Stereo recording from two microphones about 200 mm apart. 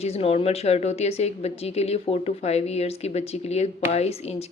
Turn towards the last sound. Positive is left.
turn(degrees=35)  # may be behind; listen again after turning